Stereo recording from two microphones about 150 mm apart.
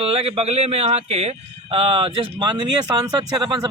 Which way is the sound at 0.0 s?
40° right (ahead or behind).